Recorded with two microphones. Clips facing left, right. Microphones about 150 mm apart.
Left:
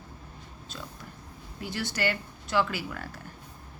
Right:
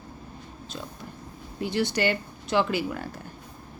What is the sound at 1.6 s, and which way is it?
A woman's voice, 20° right (ahead or behind).